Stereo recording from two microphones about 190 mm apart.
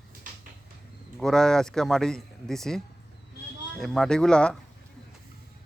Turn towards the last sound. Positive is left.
turn(degrees=5)  # may be behind; listen again after turning